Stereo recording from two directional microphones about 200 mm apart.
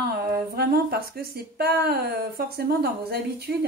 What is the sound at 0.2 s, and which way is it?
Speech, 50° right (ahead or behind).